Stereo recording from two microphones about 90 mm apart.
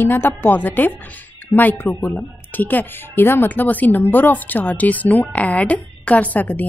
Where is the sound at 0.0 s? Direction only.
25° left (ahead or behind).